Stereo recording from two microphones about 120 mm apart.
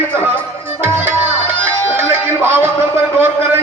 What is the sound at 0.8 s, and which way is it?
Tabla, 20° right (ahead or behind).